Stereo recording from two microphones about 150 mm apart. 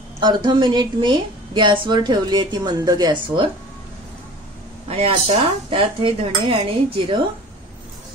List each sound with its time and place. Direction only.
0.2 s a woman's voice: 30° right (ahead or behind)
4.8 s speech: 40° right (ahead or behind)